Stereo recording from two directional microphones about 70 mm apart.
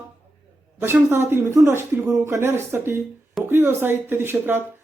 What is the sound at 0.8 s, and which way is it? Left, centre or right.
Speech, right.